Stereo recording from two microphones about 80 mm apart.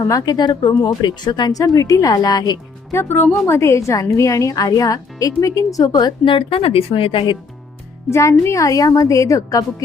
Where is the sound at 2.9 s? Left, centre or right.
Left.